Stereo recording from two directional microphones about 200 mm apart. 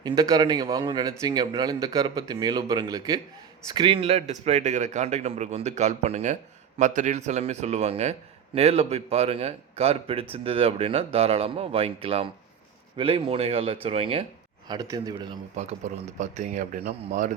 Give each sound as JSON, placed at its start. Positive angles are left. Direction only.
{"t": 0.0, "sound": "a man's voice", "side_deg": -15}
{"t": 15.5, "sound": "speech", "side_deg": -35}